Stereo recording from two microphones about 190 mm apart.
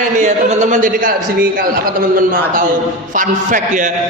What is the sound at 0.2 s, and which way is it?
A man's voice, 40° right (ahead or behind).